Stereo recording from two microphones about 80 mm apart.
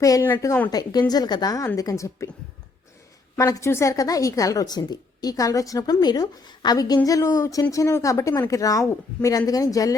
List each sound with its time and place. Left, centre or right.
0.0 s a woman's voice: left
3.3 s a woman's voice: left